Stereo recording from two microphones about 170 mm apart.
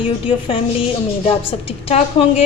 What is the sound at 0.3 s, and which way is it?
A woman's voice, 30° left (ahead or behind).